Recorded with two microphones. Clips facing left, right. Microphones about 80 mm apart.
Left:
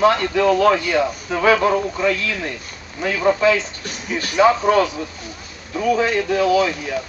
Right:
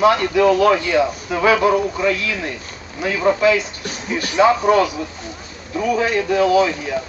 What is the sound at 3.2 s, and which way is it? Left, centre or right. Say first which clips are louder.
Speech: right 1 dB; centre.